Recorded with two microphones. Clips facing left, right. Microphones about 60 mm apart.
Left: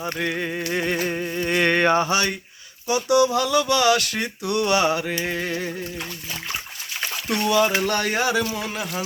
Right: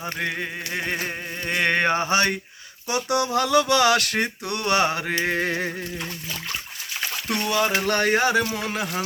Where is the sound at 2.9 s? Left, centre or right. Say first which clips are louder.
Left 5 dB; right.